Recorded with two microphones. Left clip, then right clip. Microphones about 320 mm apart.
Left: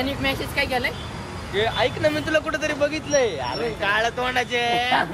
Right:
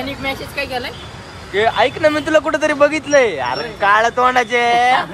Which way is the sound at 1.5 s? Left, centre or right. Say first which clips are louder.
Right 8 dB; right.